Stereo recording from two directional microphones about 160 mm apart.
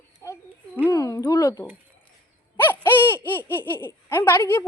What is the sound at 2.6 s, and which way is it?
Speech, 15° left (ahead or behind).